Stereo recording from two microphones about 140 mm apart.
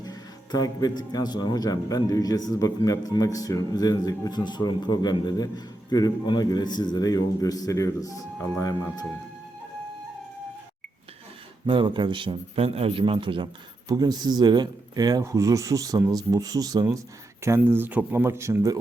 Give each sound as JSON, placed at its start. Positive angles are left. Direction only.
{"t": 0.0, "sound": "speech", "side_deg": 25}
{"t": 11.6, "sound": "a man's voice", "side_deg": -35}